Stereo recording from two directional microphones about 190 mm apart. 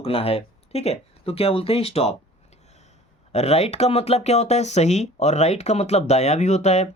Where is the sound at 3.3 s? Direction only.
35° left (ahead or behind).